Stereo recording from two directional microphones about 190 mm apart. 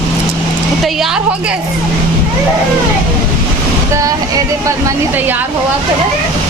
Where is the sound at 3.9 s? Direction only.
20° right (ahead or behind).